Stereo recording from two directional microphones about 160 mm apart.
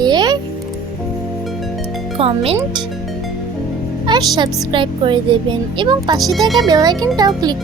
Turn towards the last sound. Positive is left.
turn(degrees=-25)  # may be behind; listen again after turning